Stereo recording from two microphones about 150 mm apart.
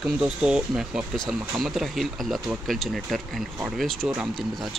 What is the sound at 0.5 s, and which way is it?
Speech, 5° right (ahead or behind).